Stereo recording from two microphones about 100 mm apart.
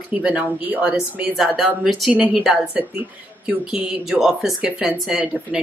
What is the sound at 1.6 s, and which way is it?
Speech, centre (ahead or behind).